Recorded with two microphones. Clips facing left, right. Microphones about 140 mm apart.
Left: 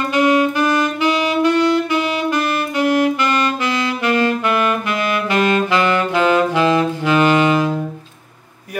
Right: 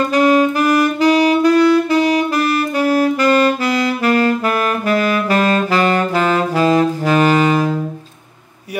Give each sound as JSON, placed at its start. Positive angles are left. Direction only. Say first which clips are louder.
{"t": 0.1, "sound": "saxophone", "louder": "even", "side_deg": -40}